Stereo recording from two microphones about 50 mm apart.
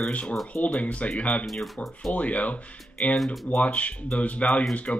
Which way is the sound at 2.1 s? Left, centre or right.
Left.